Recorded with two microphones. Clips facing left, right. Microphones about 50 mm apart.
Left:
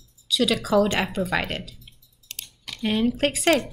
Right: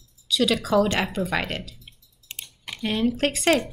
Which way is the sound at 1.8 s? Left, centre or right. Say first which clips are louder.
Right 1 dB; centre.